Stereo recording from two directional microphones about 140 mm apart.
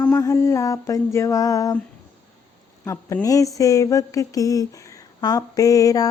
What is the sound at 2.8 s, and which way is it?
Speech, 20° left (ahead or behind).